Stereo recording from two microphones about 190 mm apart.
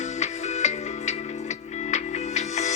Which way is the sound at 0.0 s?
40° left (ahead or behind).